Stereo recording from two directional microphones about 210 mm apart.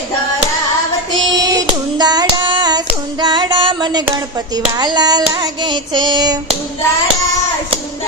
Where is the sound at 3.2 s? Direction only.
20° right (ahead or behind).